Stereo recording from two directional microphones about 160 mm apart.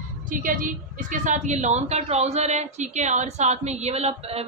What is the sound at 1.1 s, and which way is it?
A woman's voice, 50° right (ahead or behind).